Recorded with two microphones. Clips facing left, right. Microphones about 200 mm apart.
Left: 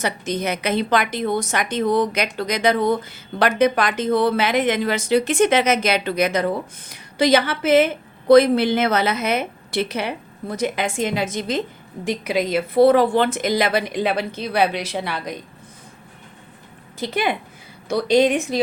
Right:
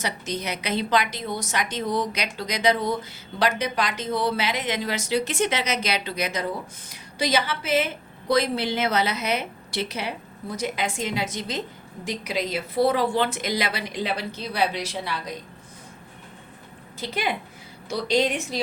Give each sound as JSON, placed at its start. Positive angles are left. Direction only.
{"t": 0.0, "sound": "a woman's voice", "side_deg": 50}
{"t": 17.8, "sound": "a woman's voice", "side_deg": 55}